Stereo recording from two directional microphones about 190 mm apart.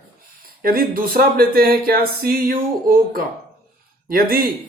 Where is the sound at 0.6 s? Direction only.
50° right (ahead or behind).